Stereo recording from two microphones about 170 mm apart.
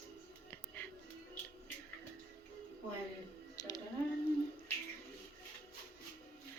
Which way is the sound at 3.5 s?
20° left (ahead or behind).